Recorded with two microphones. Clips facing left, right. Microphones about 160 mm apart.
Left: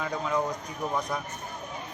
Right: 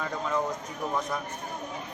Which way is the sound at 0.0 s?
5° left (ahead or behind).